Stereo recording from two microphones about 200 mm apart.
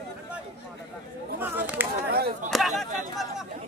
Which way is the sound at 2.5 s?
Centre (ahead or behind).